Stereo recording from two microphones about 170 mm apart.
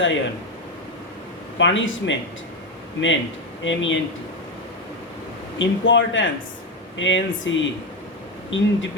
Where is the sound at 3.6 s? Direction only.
90° left.